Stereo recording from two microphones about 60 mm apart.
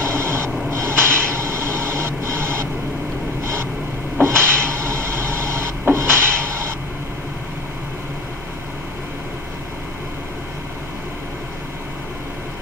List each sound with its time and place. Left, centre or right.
0.0 s a sound: right
0.7 s printer: right
4.2 s wood: right